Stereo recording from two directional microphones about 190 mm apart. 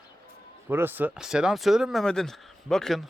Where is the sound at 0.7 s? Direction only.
10° right (ahead or behind).